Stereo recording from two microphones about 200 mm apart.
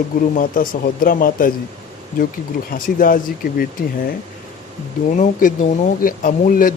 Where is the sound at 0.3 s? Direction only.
45° left (ahead or behind).